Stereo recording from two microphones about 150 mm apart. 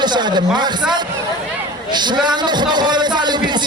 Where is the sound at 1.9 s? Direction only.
30° right (ahead or behind).